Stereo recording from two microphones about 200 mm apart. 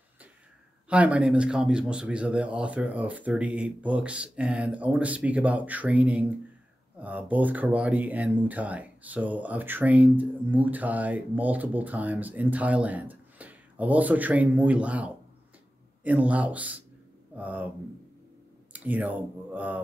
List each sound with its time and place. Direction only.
0.8 s speech: 5° right (ahead or behind)
18.7 s speech: 5° right (ahead or behind)